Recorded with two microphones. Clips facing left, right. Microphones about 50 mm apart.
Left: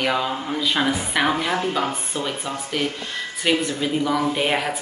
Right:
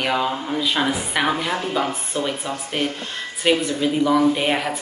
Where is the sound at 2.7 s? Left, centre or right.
Right.